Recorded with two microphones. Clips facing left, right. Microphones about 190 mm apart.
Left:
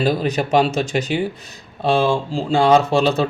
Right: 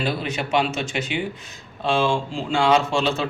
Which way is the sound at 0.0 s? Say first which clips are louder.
Left 7 dB; 40° left (ahead or behind).